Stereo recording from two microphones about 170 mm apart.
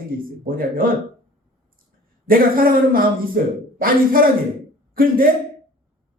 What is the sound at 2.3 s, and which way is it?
A man's voice, 60° right (ahead or behind).